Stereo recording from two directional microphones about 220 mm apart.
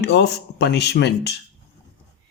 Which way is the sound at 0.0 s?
50° left (ahead or behind).